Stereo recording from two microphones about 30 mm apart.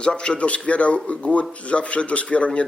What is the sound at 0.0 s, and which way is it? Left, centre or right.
Speech, left.